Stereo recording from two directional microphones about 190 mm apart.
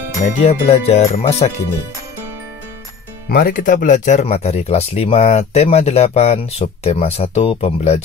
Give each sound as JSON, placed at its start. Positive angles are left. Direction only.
{"t": 0.5, "sound": "speech", "side_deg": 30}
{"t": 3.3, "sound": "speech", "side_deg": 50}